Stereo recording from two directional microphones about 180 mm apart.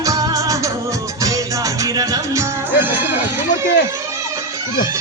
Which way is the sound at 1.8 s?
20° right (ahead or behind).